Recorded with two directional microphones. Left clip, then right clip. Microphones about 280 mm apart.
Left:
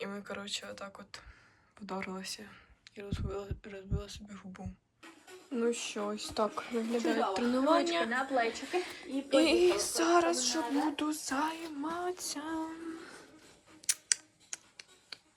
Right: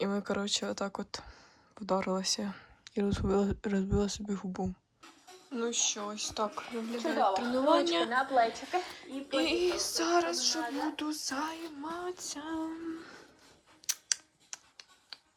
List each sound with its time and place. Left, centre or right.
0.0 s speech: centre
5.5 s speech: centre
13.9 s clicking: centre